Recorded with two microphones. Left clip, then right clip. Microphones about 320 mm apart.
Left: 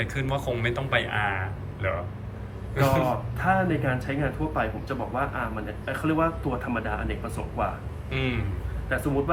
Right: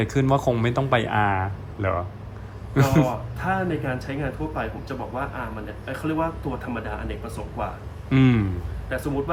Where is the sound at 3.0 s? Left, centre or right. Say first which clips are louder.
Left 1 dB; centre.